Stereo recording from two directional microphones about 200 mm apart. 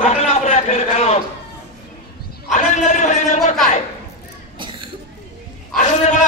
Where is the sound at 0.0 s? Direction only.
35° left (ahead or behind).